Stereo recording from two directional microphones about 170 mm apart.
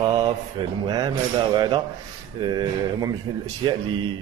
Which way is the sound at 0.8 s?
25° right (ahead or behind).